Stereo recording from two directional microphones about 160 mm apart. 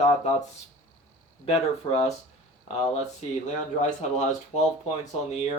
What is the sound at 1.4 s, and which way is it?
Speech, 40° left (ahead or behind).